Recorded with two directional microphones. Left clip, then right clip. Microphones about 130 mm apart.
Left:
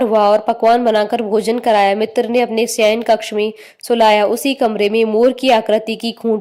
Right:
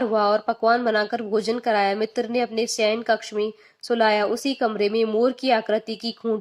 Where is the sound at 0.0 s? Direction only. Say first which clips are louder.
Left 8 dB; 45° left (ahead or behind).